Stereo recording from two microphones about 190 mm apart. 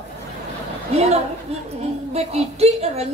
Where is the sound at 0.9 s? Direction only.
35° right (ahead or behind).